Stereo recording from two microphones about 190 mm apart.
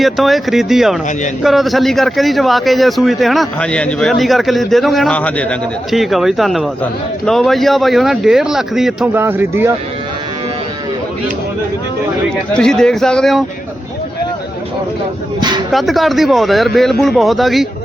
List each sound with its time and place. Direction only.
0.0 s speech: centre (ahead or behind)
12.5 s speech: 5° left (ahead or behind)
15.4 s a sound: 25° right (ahead or behind)
15.7 s speech: centre (ahead or behind)